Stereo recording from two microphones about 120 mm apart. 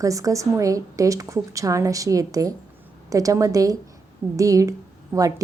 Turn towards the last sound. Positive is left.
turn(degrees=-30)  # may be behind; listen again after turning